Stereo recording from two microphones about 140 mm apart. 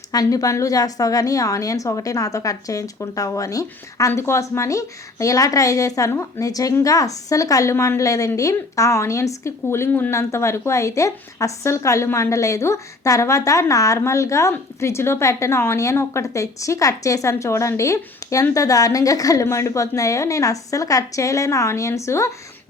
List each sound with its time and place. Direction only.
0.1 s a woman's voice: 25° left (ahead or behind)